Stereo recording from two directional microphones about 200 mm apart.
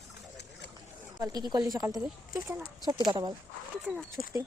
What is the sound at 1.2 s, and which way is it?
Speech, 20° right (ahead or behind).